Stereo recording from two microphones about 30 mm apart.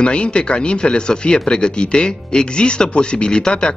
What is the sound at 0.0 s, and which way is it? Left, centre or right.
Speech, left.